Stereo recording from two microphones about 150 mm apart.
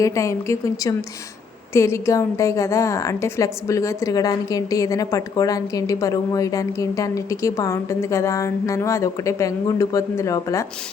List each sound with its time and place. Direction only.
0.0 s a woman's voice: 20° left (ahead or behind)